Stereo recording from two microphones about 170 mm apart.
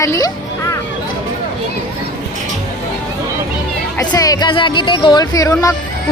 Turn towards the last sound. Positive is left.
turn(degrees=20)  # may be behind; listen again after turning